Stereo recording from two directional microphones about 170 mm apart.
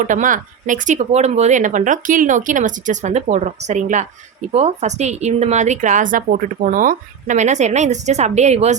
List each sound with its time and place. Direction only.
0.0 s a woman's voice: 50° right (ahead or behind)